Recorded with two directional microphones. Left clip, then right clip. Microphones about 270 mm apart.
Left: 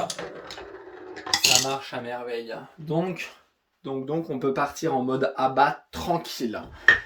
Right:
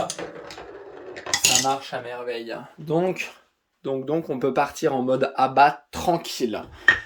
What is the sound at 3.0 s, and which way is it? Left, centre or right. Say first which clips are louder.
Speech: right 4 dB; centre.